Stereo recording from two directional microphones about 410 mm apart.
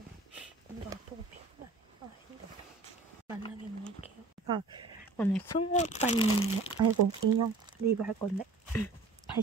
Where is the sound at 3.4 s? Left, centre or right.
Centre.